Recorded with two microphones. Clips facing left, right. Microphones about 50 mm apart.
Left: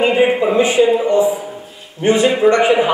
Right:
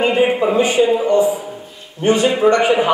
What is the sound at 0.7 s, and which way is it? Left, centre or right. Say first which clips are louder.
A man's voice: left 1 dB; centre.